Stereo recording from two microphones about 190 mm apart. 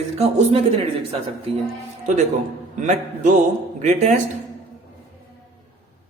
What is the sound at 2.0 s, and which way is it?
A man's voice, 40° right (ahead or behind).